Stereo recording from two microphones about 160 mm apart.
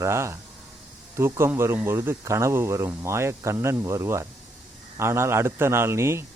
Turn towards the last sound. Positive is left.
turn(degrees=-15)  # may be behind; listen again after turning